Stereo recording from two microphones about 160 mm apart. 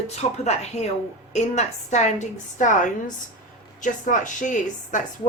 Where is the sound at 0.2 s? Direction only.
40° left (ahead or behind).